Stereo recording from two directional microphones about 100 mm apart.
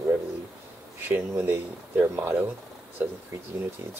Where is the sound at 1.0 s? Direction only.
20° right (ahead or behind).